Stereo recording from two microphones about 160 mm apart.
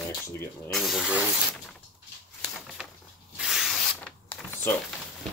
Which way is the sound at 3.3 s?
5° right (ahead or behind).